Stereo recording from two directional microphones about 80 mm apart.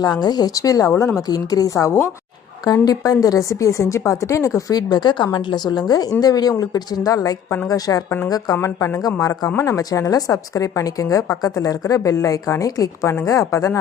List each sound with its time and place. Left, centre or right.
0.0 s a woman's voice: left
1.3 s a woman's voice: left
2.8 s a woman's voice: left
8.6 s speech: left
9.0 s a woman's voice: left